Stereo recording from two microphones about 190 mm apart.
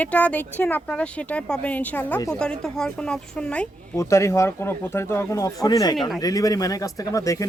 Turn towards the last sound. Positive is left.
turn(degrees=15)  # may be behind; listen again after turning